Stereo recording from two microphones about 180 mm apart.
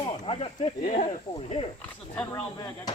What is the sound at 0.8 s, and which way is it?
Speech, 45° left (ahead or behind).